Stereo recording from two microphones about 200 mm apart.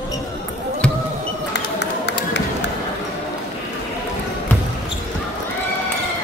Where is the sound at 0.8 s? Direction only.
5° left (ahead or behind).